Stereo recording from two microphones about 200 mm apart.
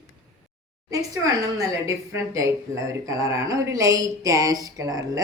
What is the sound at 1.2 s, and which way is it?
Speech, 15° right (ahead or behind).